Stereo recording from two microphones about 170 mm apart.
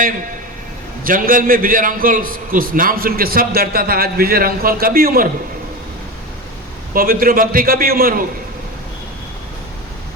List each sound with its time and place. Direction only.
1.0 s a man's voice: 55° right (ahead or behind)
6.9 s a man's voice: 55° right (ahead or behind)